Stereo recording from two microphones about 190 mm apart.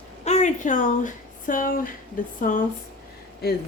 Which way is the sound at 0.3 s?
40° left (ahead or behind).